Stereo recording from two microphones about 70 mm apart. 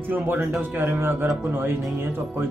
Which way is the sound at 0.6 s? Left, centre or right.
Right.